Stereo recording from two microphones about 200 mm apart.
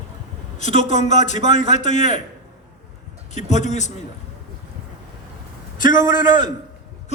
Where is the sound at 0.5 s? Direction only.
35° left (ahead or behind).